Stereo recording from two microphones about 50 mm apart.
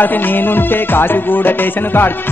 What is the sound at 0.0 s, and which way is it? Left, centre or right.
Music, left.